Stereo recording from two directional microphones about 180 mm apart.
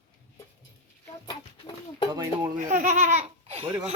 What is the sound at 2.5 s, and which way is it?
Speech, 45° right (ahead or behind).